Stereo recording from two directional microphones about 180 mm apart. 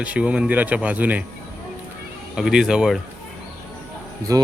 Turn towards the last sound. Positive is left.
turn(degrees=-20)  # may be behind; listen again after turning